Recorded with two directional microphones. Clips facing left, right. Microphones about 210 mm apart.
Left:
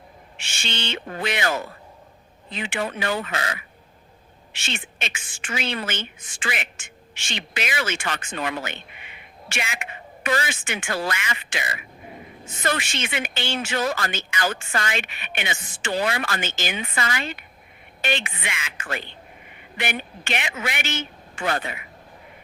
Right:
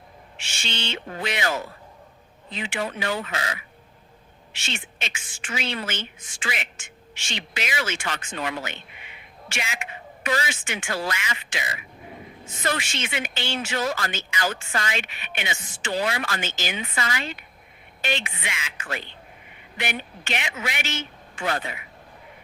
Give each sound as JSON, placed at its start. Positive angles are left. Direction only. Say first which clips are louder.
{"t": 0.3, "sound": "a woman's voice", "louder": "left 1 dB", "side_deg": 55}